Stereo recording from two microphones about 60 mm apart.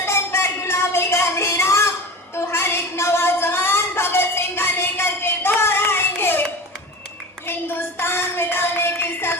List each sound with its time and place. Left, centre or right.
0.0 s music: left
2.3 s a sound: left
7.4 s child singing: left